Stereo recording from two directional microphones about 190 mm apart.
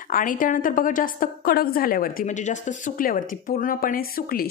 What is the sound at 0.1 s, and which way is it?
A woman's voice, 45° left (ahead or behind).